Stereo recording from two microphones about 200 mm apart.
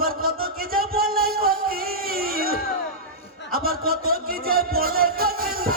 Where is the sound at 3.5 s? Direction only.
50° right (ahead or behind).